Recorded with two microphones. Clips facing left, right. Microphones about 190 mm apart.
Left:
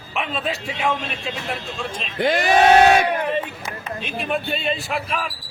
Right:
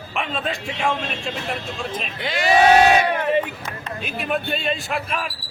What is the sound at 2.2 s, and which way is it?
Speech, 50° left (ahead or behind).